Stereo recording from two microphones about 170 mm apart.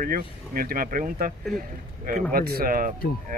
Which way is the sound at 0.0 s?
60° right (ahead or behind).